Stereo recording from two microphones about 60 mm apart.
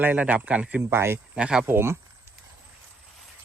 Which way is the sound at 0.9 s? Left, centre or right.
Right.